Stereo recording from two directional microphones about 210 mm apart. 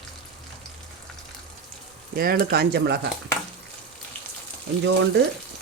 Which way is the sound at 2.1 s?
45° right (ahead or behind).